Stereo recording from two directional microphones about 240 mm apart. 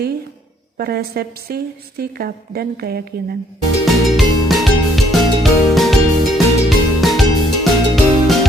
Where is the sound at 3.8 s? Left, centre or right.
Centre.